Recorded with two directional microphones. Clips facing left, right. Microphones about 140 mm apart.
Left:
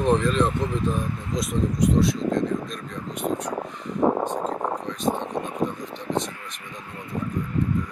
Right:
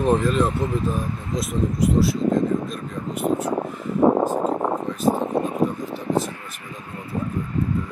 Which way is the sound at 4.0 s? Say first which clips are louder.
Right 5 dB; 55° right (ahead or behind).